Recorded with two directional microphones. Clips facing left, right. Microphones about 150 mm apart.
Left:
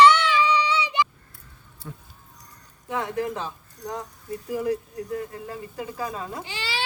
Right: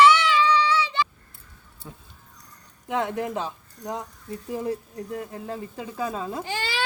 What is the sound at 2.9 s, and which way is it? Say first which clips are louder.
A woman's voice: right 1 dB; 20° right (ahead or behind).